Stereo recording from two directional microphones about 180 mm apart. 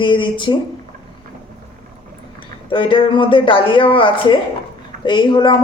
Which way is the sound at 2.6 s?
30° left (ahead or behind).